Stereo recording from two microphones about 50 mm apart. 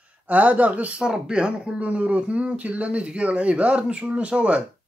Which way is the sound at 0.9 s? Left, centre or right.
Centre.